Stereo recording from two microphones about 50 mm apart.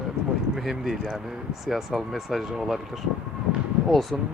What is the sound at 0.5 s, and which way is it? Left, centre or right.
Speech, centre.